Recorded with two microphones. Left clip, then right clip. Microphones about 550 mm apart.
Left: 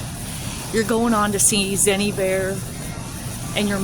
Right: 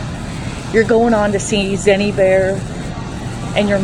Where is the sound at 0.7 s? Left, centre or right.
Left.